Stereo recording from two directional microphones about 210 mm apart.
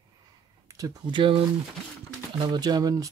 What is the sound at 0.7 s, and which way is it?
Speech, 15° right (ahead or behind).